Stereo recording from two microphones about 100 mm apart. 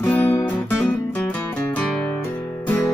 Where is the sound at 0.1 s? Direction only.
20° left (ahead or behind).